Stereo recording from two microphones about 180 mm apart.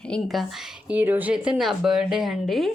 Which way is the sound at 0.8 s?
10° right (ahead or behind).